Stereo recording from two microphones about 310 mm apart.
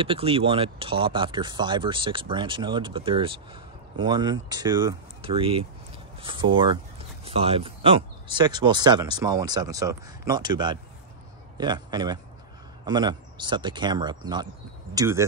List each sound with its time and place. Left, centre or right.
0.0 s a man's voice: centre